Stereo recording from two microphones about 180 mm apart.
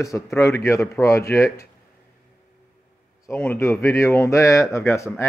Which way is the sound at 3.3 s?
10° left (ahead or behind).